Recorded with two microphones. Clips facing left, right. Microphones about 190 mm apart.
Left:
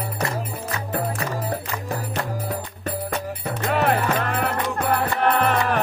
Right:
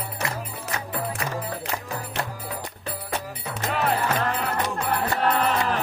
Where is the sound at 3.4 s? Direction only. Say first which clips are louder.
Left 5 dB; 60° left (ahead or behind).